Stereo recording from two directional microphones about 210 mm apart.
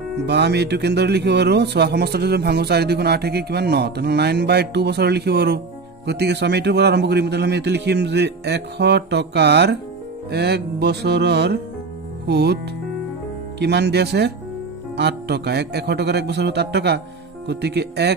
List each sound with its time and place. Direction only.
0.3 s speech: 55° right (ahead or behind)
13.6 s speech: 55° right (ahead or behind)